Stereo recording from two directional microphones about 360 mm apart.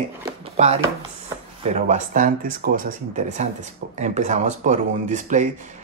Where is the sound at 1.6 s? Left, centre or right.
Centre.